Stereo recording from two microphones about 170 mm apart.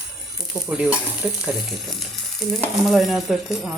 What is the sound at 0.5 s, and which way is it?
Speech, 5° right (ahead or behind).